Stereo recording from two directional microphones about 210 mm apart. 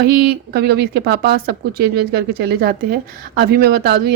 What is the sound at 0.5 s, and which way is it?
A woman's voice, 50° right (ahead or behind).